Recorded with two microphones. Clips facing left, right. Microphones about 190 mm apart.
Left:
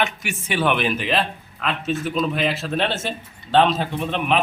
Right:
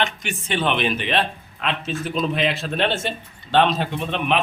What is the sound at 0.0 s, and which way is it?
A man's voice, 5° left (ahead or behind).